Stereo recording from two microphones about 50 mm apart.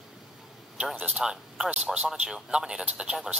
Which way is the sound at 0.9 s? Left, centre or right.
Right.